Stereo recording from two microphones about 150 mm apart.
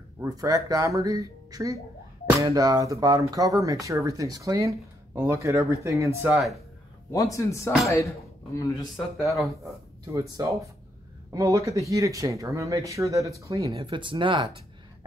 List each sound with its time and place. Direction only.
0.2 s speech: 25° right (ahead or behind)
7.1 s a man's voice: 20° left (ahead or behind)
8.9 s speech: centre (ahead or behind)
11.3 s speech: 20° right (ahead or behind)
13.7 s speech: 35° right (ahead or behind)